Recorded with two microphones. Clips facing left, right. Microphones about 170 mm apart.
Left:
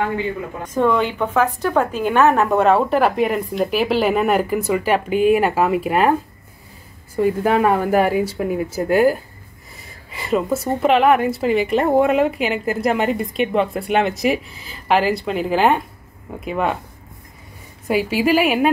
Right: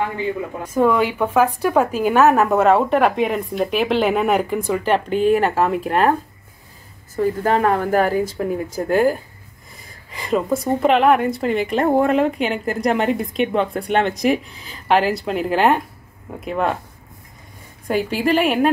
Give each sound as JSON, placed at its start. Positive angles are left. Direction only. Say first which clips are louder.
{"t": 0.7, "sound": "a woman's voice", "louder": "right 1 dB", "side_deg": -5}
{"t": 7.2, "sound": "a woman's voice", "louder": "left 1 dB", "side_deg": 10}
{"t": 17.8, "sound": "a woman's voice", "louder": "left 1 dB", "side_deg": 5}